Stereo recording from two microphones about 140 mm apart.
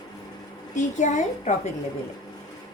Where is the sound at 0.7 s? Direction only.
60° left (ahead or behind).